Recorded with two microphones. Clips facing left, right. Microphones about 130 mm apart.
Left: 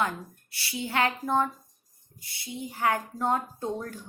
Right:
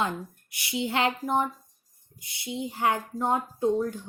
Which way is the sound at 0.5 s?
20° right (ahead or behind).